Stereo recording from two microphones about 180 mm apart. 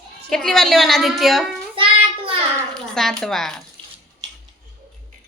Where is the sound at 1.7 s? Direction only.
30° right (ahead or behind).